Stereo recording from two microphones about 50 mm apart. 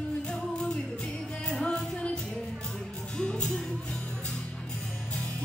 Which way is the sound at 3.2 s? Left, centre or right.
Centre.